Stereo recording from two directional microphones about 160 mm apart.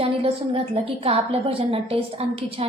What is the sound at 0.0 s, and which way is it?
A woman's voice, 35° right (ahead or behind).